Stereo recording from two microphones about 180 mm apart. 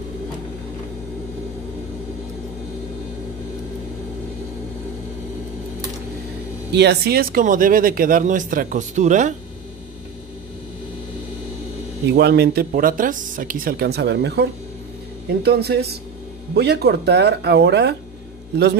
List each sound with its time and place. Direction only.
6.7 s speech: 65° right (ahead or behind); by 9.3 s 45° right (ahead or behind)
12.1 s speech: 65° right (ahead or behind)